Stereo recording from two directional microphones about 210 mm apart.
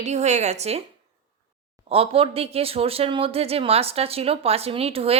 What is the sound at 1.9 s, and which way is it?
Speech, 25° right (ahead or behind).